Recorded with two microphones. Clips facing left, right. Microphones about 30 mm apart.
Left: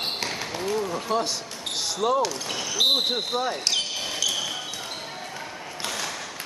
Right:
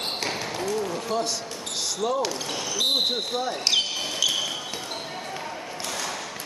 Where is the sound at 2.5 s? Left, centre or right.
Centre.